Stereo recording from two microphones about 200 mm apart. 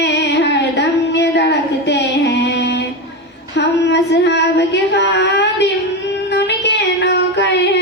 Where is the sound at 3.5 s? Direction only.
60° left (ahead or behind).